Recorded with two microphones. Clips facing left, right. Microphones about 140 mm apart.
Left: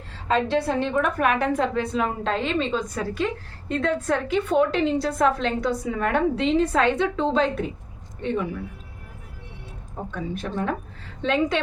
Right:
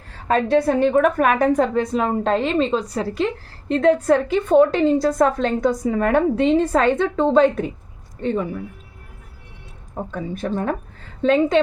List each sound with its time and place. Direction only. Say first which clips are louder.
0.8 s a woman's voice: right 6 dB; 45° right (ahead or behind)
9.9 s a woman's voice: right 3 dB; 45° right (ahead or behind)